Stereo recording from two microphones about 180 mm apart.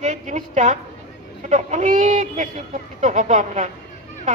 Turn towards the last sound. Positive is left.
turn(degrees=-40)  # may be behind; listen again after turning